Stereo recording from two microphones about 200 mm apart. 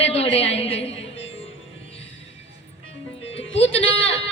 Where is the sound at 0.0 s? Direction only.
30° left (ahead or behind).